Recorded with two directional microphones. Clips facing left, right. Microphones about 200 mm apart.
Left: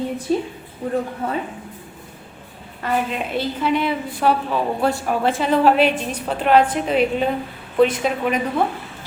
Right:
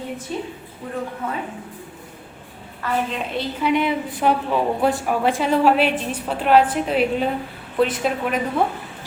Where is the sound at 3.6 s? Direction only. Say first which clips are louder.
Right 2 dB; 20° right (ahead or behind); by 8.4 s centre (ahead or behind).